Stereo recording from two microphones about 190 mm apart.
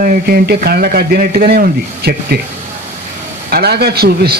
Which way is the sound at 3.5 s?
55° right (ahead or behind).